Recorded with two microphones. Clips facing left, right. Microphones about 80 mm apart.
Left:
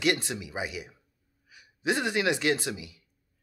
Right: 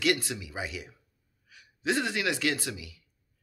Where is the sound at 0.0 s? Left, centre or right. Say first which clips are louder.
Left 1 dB; left.